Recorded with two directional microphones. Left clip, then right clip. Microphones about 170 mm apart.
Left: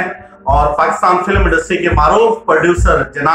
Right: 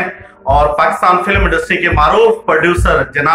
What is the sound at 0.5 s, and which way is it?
Speech, 10° right (ahead or behind).